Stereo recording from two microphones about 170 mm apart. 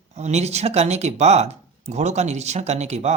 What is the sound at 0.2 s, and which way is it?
A man's voice, 40° right (ahead or behind).